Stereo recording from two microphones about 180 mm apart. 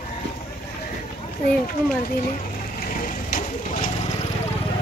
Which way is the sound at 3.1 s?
45° left (ahead or behind).